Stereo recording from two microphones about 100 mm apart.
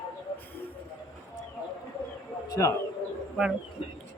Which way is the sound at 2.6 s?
25° left (ahead or behind).